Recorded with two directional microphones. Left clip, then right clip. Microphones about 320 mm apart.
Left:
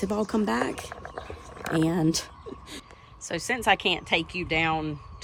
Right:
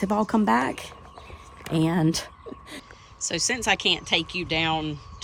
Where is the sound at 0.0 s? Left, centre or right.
Right.